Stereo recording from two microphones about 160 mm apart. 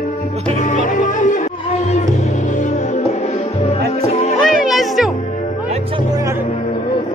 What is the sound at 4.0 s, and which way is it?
Music, 40° left (ahead or behind).